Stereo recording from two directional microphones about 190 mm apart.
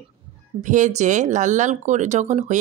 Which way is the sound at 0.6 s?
40° right (ahead or behind).